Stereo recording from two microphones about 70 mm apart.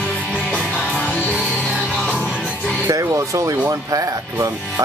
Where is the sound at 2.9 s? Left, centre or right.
Right.